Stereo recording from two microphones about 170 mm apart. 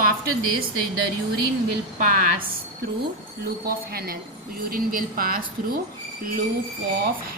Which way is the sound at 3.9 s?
65° right (ahead or behind).